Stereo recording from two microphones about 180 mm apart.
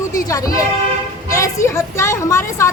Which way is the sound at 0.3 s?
20° left (ahead or behind).